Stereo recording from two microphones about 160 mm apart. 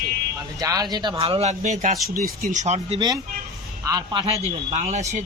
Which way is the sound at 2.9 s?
25° right (ahead or behind).